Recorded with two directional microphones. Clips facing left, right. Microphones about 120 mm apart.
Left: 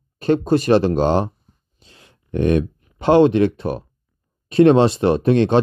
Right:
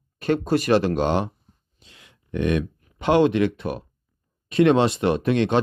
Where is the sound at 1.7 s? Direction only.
35° left (ahead or behind).